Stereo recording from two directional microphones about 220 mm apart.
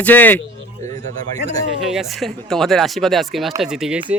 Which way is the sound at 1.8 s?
Centre (ahead or behind).